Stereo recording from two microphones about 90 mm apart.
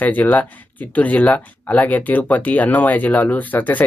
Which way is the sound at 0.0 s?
20° left (ahead or behind).